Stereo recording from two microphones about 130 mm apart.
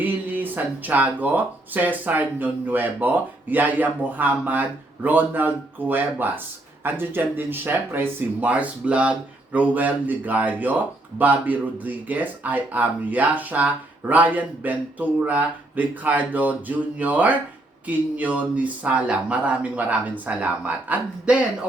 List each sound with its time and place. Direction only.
0.0 s speech: 15° right (ahead or behind)